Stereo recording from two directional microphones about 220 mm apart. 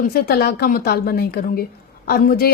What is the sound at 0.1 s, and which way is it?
A woman's voice, 45° left (ahead or behind).